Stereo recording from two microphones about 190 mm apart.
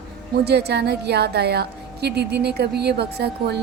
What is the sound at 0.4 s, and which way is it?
Speech, 60° right (ahead or behind).